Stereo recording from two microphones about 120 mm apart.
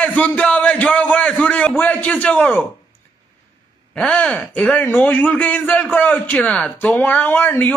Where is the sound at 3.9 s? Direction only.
10° left (ahead or behind).